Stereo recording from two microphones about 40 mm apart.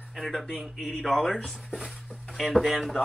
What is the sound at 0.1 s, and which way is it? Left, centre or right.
Speech, centre.